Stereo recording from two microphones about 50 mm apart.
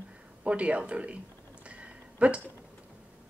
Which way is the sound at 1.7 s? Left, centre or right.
Right.